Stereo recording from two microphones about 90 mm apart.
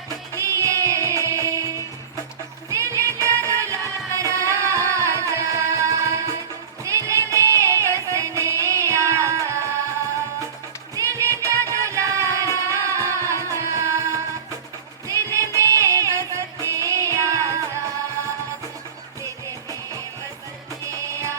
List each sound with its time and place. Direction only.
0.3 s music: 35° right (ahead or behind)
2.6 s music: 35° right (ahead or behind)
10.9 s music: 35° right (ahead or behind)
15.3 s music: 35° right (ahead or behind)